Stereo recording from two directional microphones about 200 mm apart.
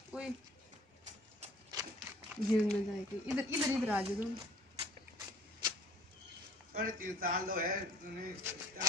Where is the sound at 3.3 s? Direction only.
5° right (ahead or behind).